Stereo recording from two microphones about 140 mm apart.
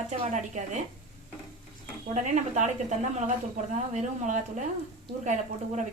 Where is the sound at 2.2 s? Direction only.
60° right (ahead or behind).